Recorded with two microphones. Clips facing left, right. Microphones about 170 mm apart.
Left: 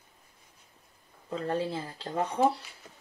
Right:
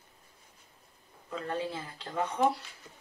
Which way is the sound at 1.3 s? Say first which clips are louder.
Left 4 dB; 35° left (ahead or behind).